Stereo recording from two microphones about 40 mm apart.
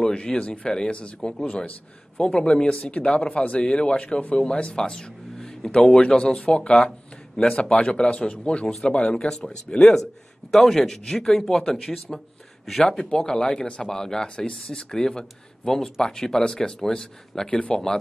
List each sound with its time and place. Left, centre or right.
0.0 s a man's voice: left
14.6 s speech: centre